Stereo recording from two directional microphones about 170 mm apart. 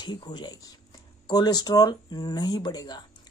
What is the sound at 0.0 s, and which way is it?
Speech, 25° left (ahead or behind).